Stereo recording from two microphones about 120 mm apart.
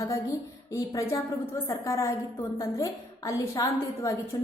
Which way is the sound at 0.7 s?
25° left (ahead or behind).